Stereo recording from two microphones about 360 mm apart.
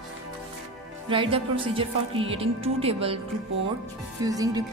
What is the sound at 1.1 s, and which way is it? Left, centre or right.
A woman's voice, centre.